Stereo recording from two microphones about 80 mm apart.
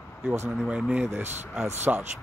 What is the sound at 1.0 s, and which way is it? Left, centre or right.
Speech, right.